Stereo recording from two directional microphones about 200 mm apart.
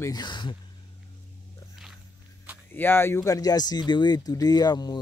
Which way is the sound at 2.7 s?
10° left (ahead or behind).